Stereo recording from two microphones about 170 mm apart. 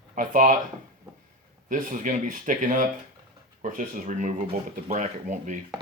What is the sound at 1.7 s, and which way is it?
Speech, 50° right (ahead or behind).